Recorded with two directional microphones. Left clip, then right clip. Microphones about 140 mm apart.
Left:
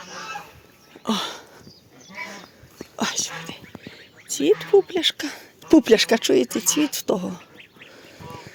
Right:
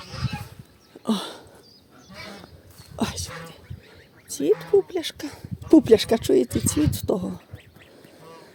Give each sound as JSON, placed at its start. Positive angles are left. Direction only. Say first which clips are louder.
{"t": 1.0, "sound": "a sound", "louder": "left 3 dB", "side_deg": -35}
{"t": 2.9, "sound": "whispering", "louder": "left 4 dB", "side_deg": -40}
{"t": 4.3, "sound": "speech", "louder": "left 3 dB", "side_deg": -15}